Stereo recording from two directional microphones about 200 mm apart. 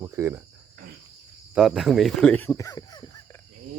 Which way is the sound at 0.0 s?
15° right (ahead or behind).